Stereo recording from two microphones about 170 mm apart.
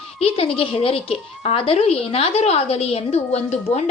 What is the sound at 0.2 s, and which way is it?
Speech, 35° left (ahead or behind).